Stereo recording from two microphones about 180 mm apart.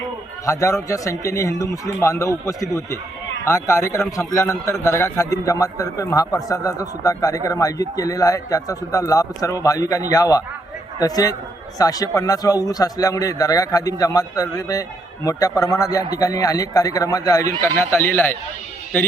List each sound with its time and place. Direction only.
0.4 s a man's voice: 15° left (ahead or behind)